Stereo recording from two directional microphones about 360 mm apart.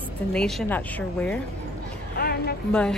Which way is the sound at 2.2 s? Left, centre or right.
Left.